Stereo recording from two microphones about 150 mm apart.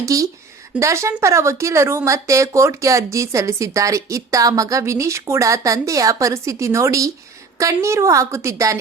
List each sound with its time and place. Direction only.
0.0 s speech: 20° right (ahead or behind)